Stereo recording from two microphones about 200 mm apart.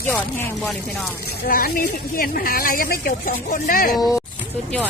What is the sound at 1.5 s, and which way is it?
A woman's voice, 45° left (ahead or behind).